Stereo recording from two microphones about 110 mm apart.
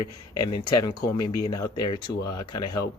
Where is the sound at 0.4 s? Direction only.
40° left (ahead or behind).